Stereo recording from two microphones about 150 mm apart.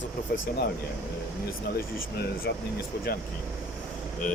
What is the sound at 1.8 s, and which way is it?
Speech, 80° left.